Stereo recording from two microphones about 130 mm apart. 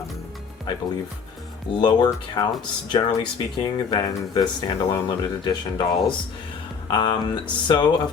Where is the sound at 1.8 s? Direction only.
35° left (ahead or behind).